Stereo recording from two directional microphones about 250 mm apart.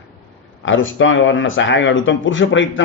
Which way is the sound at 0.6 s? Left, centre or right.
Left.